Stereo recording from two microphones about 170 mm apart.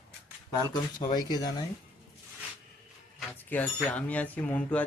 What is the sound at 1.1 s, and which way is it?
Speech, 25° left (ahead or behind).